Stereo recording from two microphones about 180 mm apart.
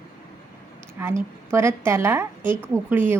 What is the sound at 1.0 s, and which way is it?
A woman's voice, 10° right (ahead or behind).